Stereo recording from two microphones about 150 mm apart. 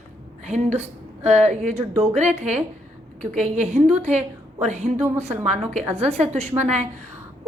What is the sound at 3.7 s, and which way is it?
A woman's voice, 50° right (ahead or behind).